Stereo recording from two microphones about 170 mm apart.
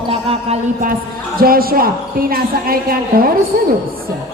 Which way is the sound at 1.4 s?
60° right (ahead or behind).